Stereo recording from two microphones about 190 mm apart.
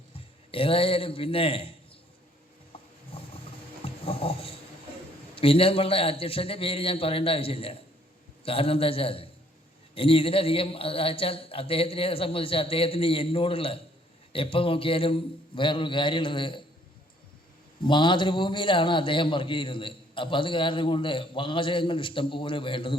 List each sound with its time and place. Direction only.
0.5 s a man's voice: 30° left (ahead or behind)
2.7 s a sound: 30° left (ahead or behind)
3.1 s vehicle: 30° left (ahead or behind)
3.8 s a sound: 30° left (ahead or behind)
5.3 s a man's voice: 30° left (ahead or behind)
17.8 s a man's voice: 25° left (ahead or behind)